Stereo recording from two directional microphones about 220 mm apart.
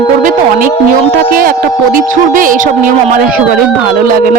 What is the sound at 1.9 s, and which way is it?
Speech, 40° right (ahead or behind).